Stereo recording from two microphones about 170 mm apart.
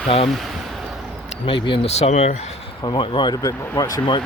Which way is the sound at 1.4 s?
30° left (ahead or behind).